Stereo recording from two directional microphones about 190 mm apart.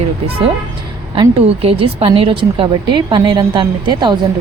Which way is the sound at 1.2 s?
30° right (ahead or behind).